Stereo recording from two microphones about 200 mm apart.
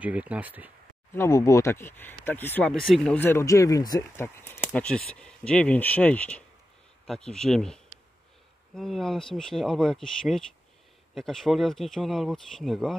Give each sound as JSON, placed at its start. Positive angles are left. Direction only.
{"t": 0.0, "sound": "speech", "side_deg": -5}
{"t": 1.1, "sound": "speech", "side_deg": 15}
{"t": 4.7, "sound": "speech", "side_deg": 5}